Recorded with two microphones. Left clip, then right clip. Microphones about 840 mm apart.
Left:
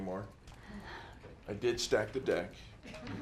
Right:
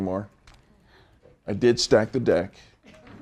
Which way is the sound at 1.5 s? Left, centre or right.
Right.